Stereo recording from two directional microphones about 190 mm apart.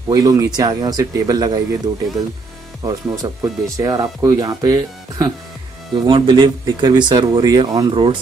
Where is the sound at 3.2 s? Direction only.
20° right (ahead or behind).